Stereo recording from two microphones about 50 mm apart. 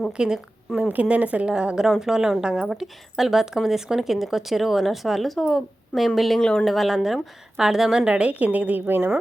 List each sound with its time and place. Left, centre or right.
0.1 s a woman's voice: centre
0.8 s a woman's voice: right
2.6 s a woman's voice: centre
6.4 s speech: centre
6.7 s a woman's voice: centre
8.0 s speech: right
8.3 s a woman's voice: right